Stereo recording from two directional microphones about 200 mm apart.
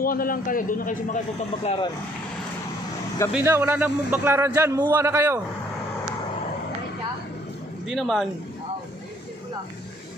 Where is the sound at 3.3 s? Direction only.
10° right (ahead or behind).